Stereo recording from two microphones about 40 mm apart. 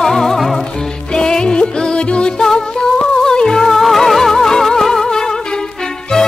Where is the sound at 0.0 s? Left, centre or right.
Centre.